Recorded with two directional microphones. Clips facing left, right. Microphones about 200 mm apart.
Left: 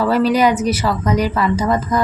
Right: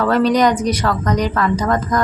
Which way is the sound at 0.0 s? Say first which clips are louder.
Even; 5° left (ahead or behind).